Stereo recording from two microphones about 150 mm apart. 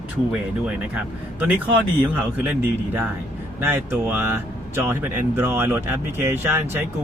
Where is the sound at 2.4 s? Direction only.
10° right (ahead or behind).